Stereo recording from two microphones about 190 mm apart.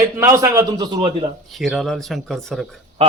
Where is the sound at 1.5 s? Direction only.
Centre (ahead or behind).